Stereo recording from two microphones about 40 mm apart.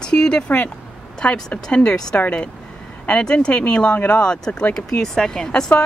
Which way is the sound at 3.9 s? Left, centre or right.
Left.